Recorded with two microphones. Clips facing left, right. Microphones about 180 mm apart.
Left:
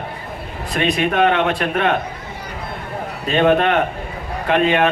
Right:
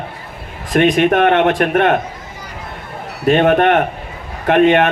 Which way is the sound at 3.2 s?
50° right (ahead or behind).